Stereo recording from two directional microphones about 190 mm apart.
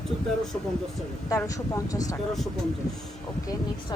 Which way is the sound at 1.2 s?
20° left (ahead or behind).